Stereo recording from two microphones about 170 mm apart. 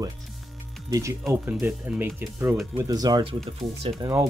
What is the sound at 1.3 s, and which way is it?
Speech, 10° right (ahead or behind).